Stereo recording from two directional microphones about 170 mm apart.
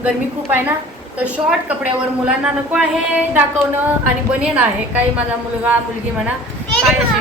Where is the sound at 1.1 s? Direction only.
5° right (ahead or behind).